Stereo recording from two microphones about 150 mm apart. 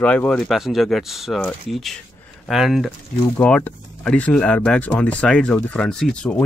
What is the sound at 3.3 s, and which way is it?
Speech, 10° left (ahead or behind).